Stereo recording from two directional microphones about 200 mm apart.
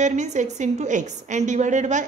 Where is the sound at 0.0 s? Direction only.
35° right (ahead or behind).